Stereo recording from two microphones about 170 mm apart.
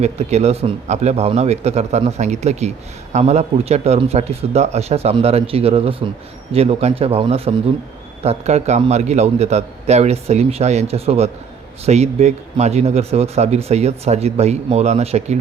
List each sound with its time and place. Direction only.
0.0 s a man's voice: 40° right (ahead or behind)